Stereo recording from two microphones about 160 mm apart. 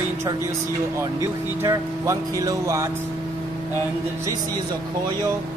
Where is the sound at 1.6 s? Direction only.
20° right (ahead or behind).